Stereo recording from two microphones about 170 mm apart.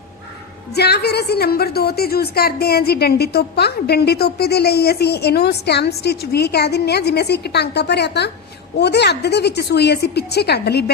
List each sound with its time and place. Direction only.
0.8 s a woman's voice: 75° left (ahead or behind)